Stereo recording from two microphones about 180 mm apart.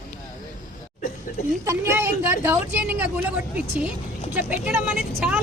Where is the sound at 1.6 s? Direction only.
15° right (ahead or behind).